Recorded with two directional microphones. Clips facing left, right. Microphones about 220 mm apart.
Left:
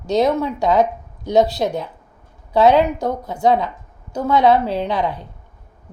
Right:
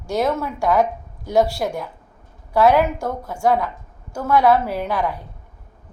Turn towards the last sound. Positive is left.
turn(degrees=20)  # may be behind; listen again after turning